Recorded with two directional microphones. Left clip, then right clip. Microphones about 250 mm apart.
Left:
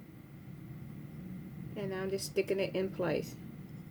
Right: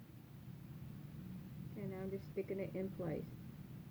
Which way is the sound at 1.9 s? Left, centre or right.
Left.